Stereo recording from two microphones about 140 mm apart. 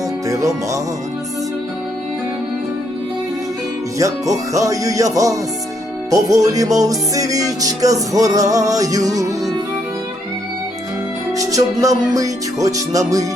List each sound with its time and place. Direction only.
0.3 s music: 20° right (ahead or behind)
3.9 s music: 25° right (ahead or behind)
11.3 s music: 25° right (ahead or behind)